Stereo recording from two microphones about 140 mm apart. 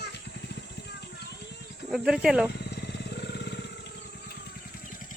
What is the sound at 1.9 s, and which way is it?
Speech, 5° right (ahead or behind).